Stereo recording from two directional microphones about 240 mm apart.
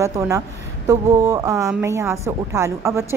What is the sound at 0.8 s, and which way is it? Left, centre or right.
Speech, centre.